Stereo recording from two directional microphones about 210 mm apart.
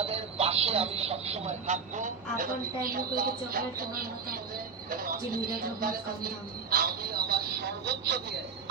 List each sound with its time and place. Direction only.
0.0 s a woman's voice: 30° right (ahead or behind); by 8.2 s 50° right (ahead or behind)